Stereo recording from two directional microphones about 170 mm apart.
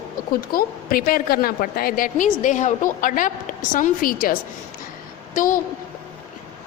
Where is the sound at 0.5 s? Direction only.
60° left (ahead or behind).